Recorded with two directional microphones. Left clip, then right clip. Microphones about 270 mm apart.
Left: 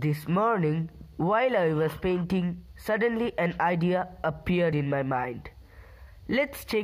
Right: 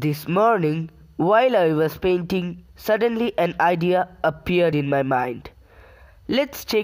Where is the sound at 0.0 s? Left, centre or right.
Right.